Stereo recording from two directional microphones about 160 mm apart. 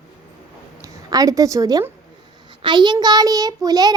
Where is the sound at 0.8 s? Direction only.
20° right (ahead or behind).